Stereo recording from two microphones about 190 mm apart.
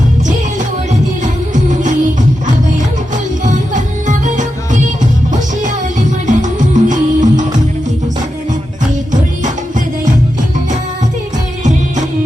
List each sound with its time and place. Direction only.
1.2 s music: 40° right (ahead or behind)
3.4 s music: 40° right (ahead or behind)